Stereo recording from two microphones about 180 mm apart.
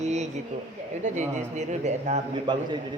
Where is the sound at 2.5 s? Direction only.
25° right (ahead or behind).